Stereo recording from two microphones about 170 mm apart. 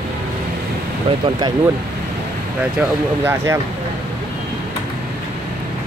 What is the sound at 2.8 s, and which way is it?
Speech, 15° right (ahead or behind).